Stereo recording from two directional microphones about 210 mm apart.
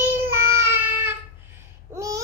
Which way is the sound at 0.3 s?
10° right (ahead or behind).